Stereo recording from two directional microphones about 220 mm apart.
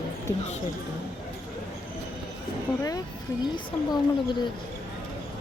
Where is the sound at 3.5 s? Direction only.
20° left (ahead or behind).